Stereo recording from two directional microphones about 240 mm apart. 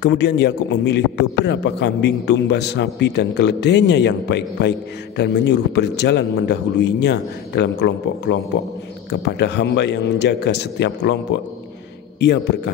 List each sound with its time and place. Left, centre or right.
0.0 s a man's voice: left
12.2 s a man's voice: left